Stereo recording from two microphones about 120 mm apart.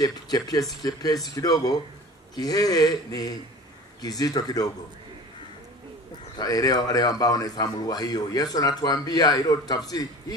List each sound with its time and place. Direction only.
0.0 s speech: 30° left (ahead or behind)
6.3 s speech: 30° left (ahead or behind)